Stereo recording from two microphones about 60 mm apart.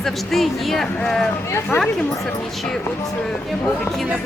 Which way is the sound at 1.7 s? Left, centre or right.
Left.